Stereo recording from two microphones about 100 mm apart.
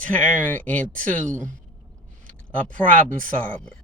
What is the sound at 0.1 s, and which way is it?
Speech, 15° left (ahead or behind).